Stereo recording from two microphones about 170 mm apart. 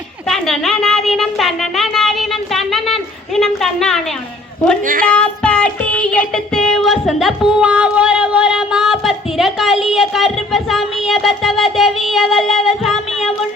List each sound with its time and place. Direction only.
0.3 s a sound: centre (ahead or behind)
4.9 s speech: 55° right (ahead or behind)
5.1 s child singing: 5° left (ahead or behind)